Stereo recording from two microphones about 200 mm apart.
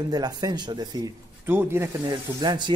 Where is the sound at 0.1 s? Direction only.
20° right (ahead or behind).